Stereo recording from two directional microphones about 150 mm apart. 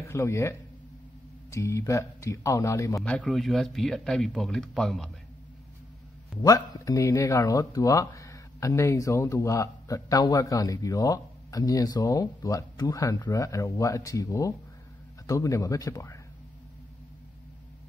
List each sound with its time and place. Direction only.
0.1 s speech: 20° left (ahead or behind)
3.0 s speech: 5° left (ahead or behind)
6.4 s speech: 25° left (ahead or behind)